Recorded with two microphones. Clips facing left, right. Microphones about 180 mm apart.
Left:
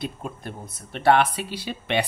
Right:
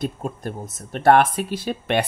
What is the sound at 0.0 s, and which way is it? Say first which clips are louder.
Speech: right 5 dB; 45° right (ahead or behind).